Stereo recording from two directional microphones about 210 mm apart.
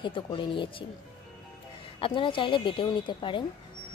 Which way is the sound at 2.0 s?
25° left (ahead or behind).